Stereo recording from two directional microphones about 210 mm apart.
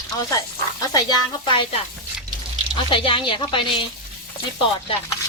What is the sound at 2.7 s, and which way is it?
Speech, 25° left (ahead or behind).